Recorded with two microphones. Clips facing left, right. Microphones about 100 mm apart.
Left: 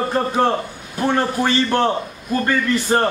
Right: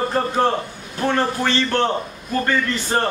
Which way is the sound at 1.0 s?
15° left (ahead or behind).